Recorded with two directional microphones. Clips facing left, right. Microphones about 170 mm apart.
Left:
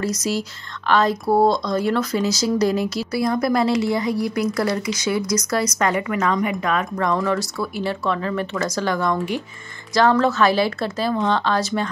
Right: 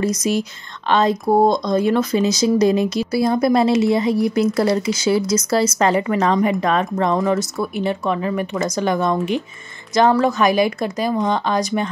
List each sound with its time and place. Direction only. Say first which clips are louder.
0.0 s a woman's voice: right 4 dB; 20° right (ahead or behind)